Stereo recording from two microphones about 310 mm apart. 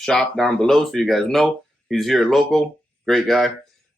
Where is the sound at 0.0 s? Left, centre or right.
Centre.